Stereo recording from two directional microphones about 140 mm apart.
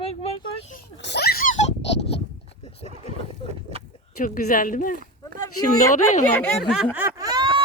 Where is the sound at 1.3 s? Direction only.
70° left (ahead or behind); by 2.9 s 45° left (ahead or behind).